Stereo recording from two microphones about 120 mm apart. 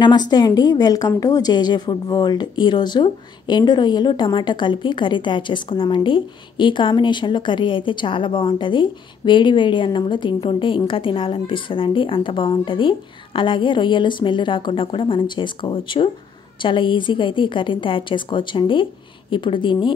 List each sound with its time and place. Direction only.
0.0 s speech: 35° left (ahead or behind)